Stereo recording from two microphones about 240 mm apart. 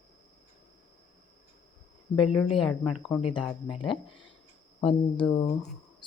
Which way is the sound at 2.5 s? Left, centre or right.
Centre.